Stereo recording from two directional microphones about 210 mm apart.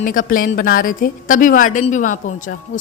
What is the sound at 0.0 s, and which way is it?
Speech, 40° left (ahead or behind).